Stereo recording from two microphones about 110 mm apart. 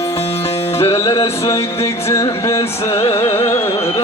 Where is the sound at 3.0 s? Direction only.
45° left (ahead or behind).